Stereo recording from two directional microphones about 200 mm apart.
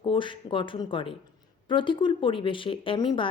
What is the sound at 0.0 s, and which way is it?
Speech, 25° left (ahead or behind).